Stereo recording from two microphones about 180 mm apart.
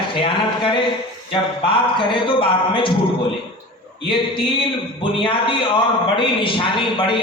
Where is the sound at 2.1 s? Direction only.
25° left (ahead or behind).